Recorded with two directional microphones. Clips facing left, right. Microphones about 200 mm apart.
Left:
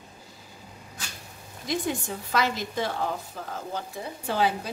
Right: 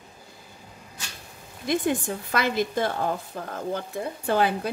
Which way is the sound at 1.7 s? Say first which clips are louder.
Right 4 dB; 55° right (ahead or behind).